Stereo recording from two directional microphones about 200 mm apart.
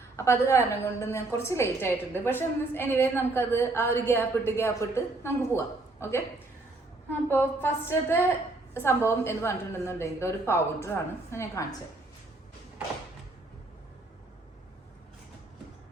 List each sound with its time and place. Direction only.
0.2 s a woman's voice: 15° left (ahead or behind)
7.3 s a woman's voice: 10° left (ahead or behind)